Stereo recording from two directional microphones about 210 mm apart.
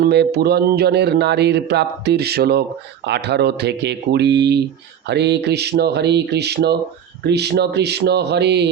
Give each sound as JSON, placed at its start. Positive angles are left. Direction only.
{"t": 0.0, "sound": "speech", "side_deg": -50}